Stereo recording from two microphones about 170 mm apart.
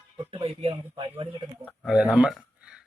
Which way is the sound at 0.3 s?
30° right (ahead or behind).